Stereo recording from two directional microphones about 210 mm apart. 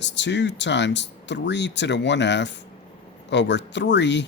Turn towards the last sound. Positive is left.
turn(degrees=55)  # may be behind; listen again after turning